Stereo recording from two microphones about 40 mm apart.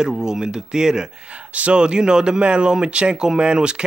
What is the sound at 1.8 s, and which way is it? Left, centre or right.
Speech, right.